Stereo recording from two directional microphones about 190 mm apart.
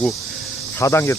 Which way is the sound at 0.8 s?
15° left (ahead or behind).